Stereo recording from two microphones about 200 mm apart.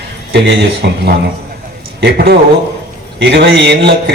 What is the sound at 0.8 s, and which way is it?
Speech, 55° right (ahead or behind).